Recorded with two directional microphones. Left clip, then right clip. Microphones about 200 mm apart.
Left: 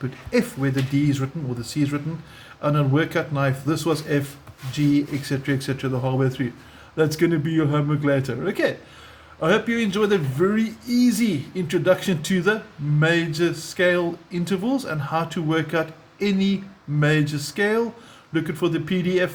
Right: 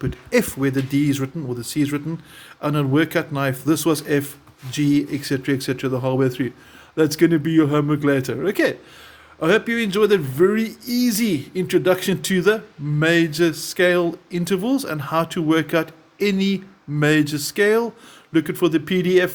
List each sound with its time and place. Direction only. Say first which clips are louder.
0.0 s speech: right 3 dB; 55° right (ahead or behind)